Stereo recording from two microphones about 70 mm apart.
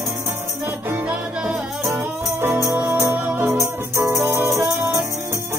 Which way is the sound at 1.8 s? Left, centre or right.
Right.